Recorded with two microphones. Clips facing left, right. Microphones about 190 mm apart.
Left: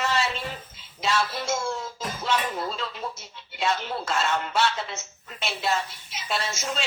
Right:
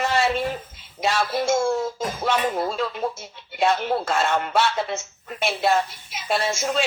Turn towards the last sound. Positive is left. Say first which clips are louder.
# right 7 dB
turn(degrees=-55)  # may be behind; listen again after turning